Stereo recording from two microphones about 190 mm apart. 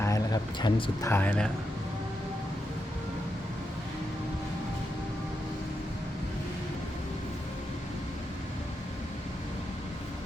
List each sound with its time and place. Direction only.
0.0 s speech: 20° left (ahead or behind)
1.1 s speech: 10° left (ahead or behind)